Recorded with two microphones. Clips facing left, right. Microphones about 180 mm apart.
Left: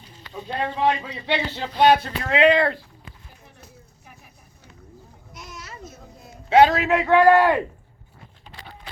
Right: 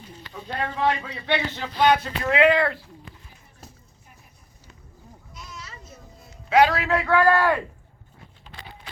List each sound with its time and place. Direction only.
0.3 s a man's voice: 20° left (ahead or behind)
1.5 s speech: 30° left (ahead or behind)
6.5 s a man's voice: 25° left (ahead or behind)